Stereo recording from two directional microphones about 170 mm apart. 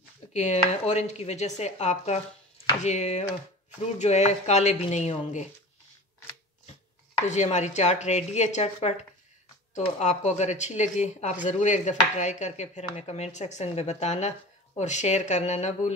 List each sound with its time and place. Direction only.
0.3 s speech: 40° left (ahead or behind)
7.2 s speech: 40° left (ahead or behind)